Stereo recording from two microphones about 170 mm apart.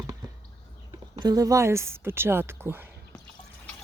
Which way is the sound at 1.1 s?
25° right (ahead or behind).